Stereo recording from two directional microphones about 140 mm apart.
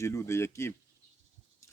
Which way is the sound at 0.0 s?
20° left (ahead or behind).